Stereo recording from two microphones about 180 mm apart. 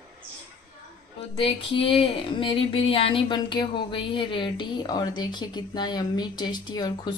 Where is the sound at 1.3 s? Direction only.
30° left (ahead or behind).